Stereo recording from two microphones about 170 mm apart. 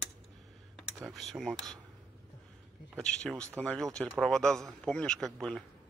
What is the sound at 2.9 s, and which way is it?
A man's voice, 5° left (ahead or behind).